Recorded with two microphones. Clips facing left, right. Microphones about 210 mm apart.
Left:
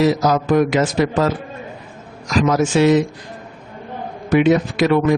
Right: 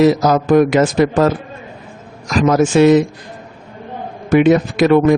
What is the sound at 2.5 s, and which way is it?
Speech, 50° right (ahead or behind).